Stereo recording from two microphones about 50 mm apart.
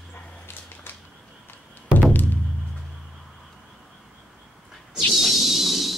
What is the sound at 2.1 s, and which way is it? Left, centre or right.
Music, left.